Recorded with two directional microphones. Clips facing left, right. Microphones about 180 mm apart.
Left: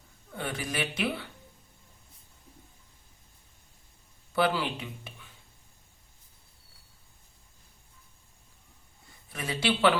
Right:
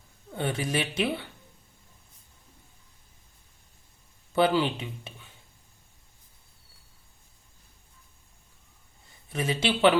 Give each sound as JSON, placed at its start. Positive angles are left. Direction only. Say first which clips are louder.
{"t": 0.3, "sound": "speech", "louder": "right 4 dB", "side_deg": -25}
{"t": 4.4, "sound": "speech", "louder": "right 4 dB", "side_deg": -25}
{"t": 9.3, "sound": "speech", "louder": "right 2 dB", "side_deg": -25}